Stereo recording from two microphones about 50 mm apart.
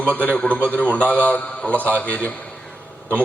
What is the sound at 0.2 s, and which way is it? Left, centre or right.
A man's voice, left.